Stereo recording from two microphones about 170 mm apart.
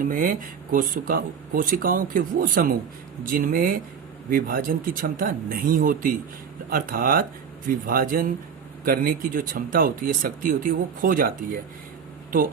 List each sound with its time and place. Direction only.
0.0 s speech: 55° right (ahead or behind)